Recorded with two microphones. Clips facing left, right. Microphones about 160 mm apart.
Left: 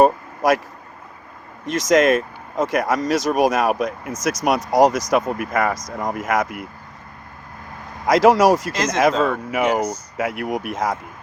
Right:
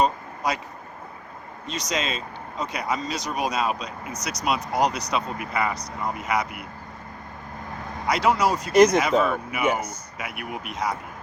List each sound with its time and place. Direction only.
0.0 s vehicle: 90° left
1.6 s speech: 90° left
8.0 s speech: 90° left